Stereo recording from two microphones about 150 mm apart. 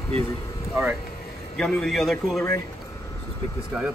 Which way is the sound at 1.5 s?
5° left (ahead or behind).